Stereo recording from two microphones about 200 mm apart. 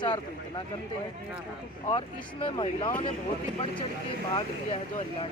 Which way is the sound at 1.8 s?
25° left (ahead or behind).